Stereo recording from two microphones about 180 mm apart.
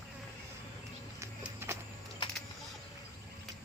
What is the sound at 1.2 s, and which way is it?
Music, 15° right (ahead or behind).